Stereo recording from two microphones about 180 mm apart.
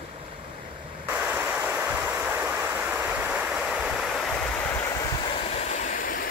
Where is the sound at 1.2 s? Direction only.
10° right (ahead or behind).